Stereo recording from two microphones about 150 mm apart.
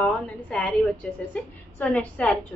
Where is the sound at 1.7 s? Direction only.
10° left (ahead or behind).